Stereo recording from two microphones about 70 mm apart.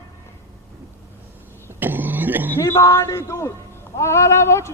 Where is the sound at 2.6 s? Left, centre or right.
Left.